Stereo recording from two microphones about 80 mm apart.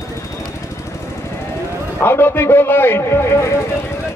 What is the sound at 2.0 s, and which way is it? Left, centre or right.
A man's voice, left.